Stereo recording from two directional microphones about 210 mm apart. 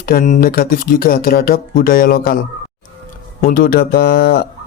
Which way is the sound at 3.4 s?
45° left (ahead or behind).